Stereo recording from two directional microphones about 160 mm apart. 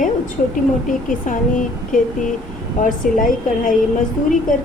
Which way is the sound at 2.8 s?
55° left (ahead or behind).